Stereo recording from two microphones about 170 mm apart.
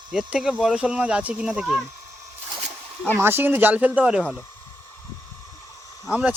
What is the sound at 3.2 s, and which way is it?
Speech, 15° right (ahead or behind).